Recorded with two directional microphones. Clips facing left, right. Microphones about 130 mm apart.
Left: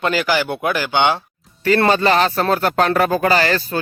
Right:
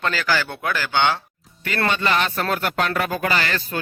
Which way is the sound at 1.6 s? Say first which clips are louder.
Left 8 dB; 35° left (ahead or behind).